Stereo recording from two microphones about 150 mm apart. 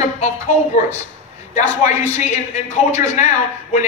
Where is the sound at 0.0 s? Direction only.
50° left (ahead or behind).